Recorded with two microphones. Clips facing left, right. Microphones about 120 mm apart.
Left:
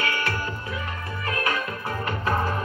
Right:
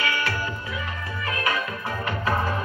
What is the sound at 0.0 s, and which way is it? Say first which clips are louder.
Music: right 1 dB; 45° left (ahead or behind).